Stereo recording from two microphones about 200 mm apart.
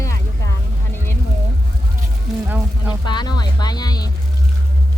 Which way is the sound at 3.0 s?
20° left (ahead or behind).